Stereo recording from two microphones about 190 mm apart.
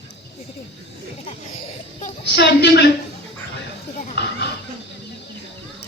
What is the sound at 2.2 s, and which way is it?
Speech, 65° left (ahead or behind).